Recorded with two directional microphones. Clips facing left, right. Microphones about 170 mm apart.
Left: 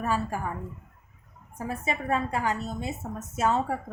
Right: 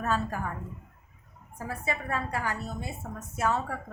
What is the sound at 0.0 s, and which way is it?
Speech, 10° left (ahead or behind).